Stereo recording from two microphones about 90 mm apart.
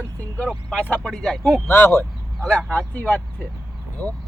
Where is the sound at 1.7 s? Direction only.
25° left (ahead or behind).